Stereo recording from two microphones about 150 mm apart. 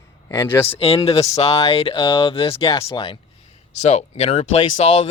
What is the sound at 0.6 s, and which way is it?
Speech, 40° left (ahead or behind).